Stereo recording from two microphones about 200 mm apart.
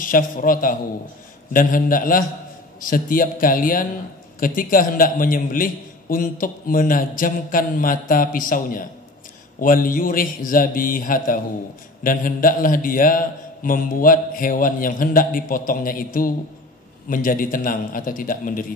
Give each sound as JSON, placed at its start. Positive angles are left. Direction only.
{"t": 0.0, "sound": "a man's voice", "side_deg": 45}